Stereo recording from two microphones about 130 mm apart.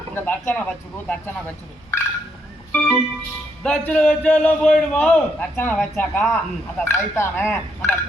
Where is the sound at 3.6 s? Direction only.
5° left (ahead or behind).